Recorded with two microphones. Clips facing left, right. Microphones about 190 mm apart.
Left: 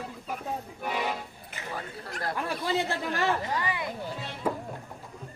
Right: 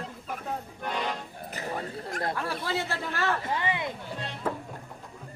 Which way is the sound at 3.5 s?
20° right (ahead or behind).